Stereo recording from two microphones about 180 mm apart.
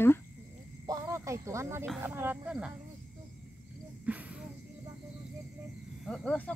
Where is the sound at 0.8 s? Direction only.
20° right (ahead or behind).